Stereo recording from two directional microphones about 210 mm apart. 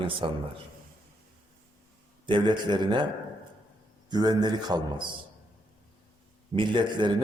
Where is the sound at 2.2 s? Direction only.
20° right (ahead or behind).